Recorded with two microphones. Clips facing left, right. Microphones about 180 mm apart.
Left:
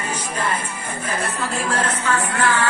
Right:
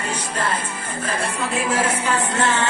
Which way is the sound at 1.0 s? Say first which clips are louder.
Right 1 dB; centre (ahead or behind).